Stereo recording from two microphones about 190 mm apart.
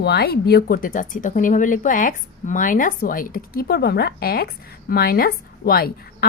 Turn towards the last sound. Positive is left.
turn(degrees=50)  # may be behind; listen again after turning